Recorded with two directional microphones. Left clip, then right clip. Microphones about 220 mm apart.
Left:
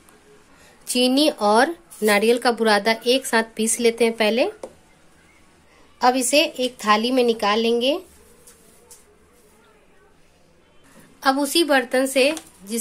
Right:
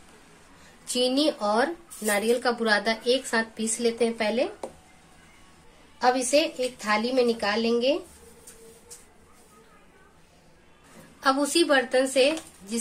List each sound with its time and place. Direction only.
0.8 s speech: 35° left (ahead or behind)
5.9 s speech: 35° left (ahead or behind)
11.1 s speech: 30° left (ahead or behind)